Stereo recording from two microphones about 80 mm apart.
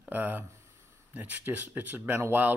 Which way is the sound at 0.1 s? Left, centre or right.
Right.